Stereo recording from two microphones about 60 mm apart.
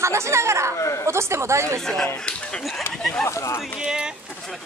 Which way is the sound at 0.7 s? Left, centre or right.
Left.